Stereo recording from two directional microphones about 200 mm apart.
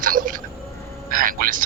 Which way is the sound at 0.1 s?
45° right (ahead or behind).